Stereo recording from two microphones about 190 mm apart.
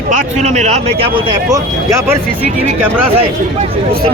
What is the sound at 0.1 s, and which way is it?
A man's voice, 40° right (ahead or behind).